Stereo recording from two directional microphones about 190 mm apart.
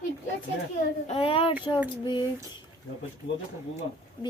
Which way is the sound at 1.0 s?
30° left (ahead or behind).